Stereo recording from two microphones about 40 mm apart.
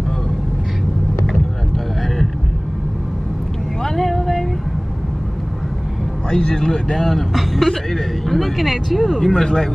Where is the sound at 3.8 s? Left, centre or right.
Centre.